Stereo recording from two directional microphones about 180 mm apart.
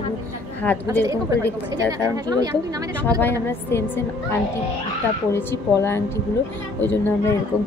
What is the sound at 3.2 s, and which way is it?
Speech, 15° left (ahead or behind).